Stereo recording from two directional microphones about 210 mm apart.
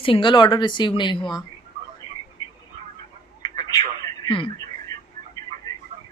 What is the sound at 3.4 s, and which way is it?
Telephone, 20° left (ahead or behind).